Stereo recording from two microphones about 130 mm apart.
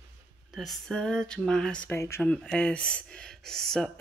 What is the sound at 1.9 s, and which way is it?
Speech, 20° left (ahead or behind).